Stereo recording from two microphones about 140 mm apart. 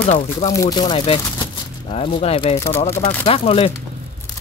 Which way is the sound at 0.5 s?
25° left (ahead or behind).